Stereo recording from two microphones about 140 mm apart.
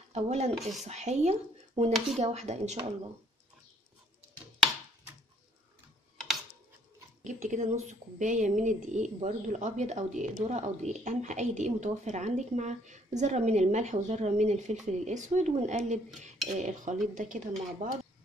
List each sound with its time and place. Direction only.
0.1 s speech: 50° right (ahead or behind)
0.6 s speech: centre (ahead or behind)
0.8 s speech: 55° right (ahead or behind)
7.2 s speech: 60° right (ahead or behind)